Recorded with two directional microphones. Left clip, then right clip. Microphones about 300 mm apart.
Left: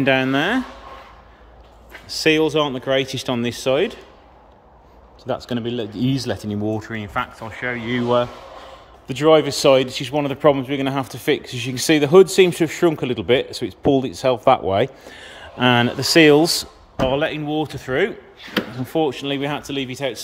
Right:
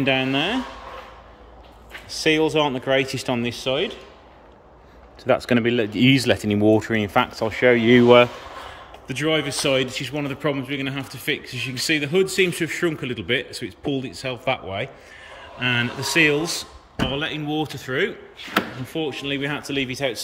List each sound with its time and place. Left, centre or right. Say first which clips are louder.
0.0 s speech: left 3 dB; centre
1.9 s speech: left 3 dB; centre
5.5 s speech: right 5 dB; right
5.9 s speech: right 6 dB; centre
6.8 s speech: right 5 dB; centre
8.0 s speech: right 4 dB; right
9.0 s speech: left 8 dB; centre